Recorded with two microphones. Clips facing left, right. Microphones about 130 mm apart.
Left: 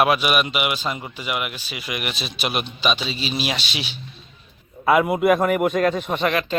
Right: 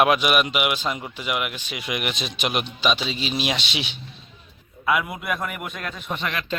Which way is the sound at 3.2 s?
15° right (ahead or behind).